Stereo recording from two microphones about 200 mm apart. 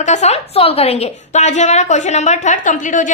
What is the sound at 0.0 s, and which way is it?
A woman's voice, 35° left (ahead or behind).